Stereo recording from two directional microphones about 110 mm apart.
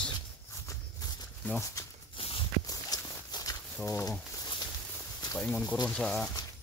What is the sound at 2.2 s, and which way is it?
Walk, 55° left (ahead or behind).